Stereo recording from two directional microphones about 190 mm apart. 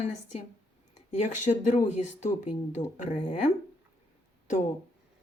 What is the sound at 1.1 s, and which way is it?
A woman's voice, 40° left (ahead or behind).